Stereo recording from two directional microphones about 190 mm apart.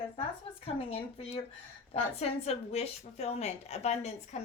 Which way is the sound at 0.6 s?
30° left (ahead or behind).